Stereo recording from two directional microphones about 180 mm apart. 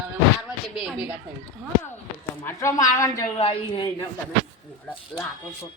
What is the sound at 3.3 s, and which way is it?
Speech, 30° left (ahead or behind).